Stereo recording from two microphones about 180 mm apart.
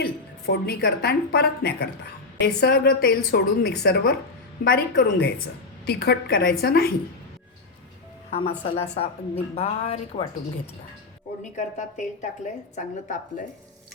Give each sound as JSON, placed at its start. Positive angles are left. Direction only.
{"t": 0.4, "sound": "a woman's voice", "side_deg": 60}
{"t": 8.3, "sound": "a woman's voice", "side_deg": 35}
{"t": 11.5, "sound": "a woman's voice", "side_deg": 40}